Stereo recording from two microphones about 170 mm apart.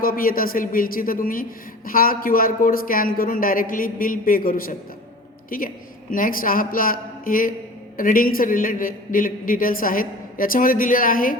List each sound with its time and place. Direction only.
0.0 s a man's voice: 55° left (ahead or behind)